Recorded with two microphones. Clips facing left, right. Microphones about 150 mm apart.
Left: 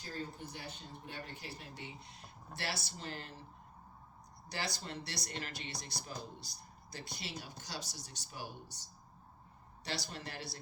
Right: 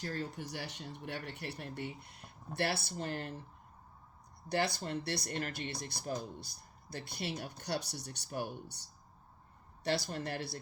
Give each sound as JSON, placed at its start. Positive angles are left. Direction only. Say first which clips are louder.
{"t": 0.0, "sound": "speech", "louder": "right 4 dB", "side_deg": -75}
{"t": 4.4, "sound": "speech", "louder": "right 8 dB", "side_deg": -55}
{"t": 9.8, "sound": "speech", "louder": "right 8 dB", "side_deg": -55}